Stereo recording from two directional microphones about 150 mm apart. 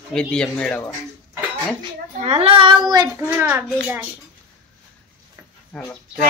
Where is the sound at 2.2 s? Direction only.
45° right (ahead or behind); by 3.1 s 25° right (ahead or behind).